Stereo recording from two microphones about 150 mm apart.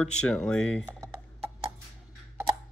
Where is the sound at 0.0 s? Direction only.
5° left (ahead or behind).